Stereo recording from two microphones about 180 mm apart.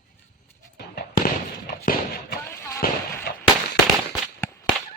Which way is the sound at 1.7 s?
60° left (ahead or behind).